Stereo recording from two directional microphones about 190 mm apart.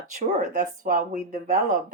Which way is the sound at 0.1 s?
40° right (ahead or behind).